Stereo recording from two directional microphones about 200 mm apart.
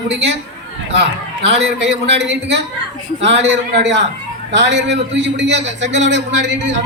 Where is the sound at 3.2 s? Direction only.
65° right (ahead or behind).